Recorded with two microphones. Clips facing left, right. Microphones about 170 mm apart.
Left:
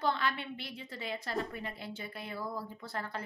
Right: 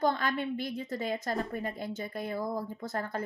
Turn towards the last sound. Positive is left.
turn(degrees=-45)  # may be behind; listen again after turning